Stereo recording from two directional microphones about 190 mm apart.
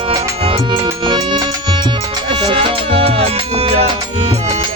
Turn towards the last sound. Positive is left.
turn(degrees=-30)  # may be behind; listen again after turning